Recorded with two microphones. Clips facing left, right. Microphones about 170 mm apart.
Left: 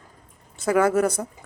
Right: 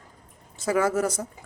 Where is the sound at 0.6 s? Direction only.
60° left (ahead or behind).